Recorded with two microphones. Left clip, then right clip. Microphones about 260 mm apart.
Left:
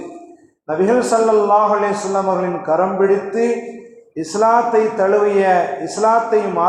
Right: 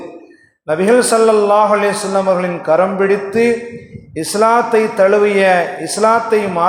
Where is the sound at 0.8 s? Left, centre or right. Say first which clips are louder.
Right 3 dB; right.